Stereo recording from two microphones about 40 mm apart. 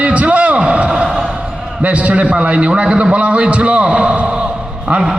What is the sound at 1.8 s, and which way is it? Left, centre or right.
A man's voice, right.